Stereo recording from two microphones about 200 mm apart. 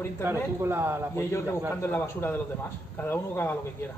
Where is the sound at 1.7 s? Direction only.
10° left (ahead or behind).